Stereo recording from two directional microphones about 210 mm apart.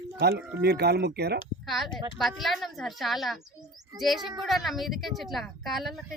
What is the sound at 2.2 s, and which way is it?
A woman's voice, centre (ahead or behind).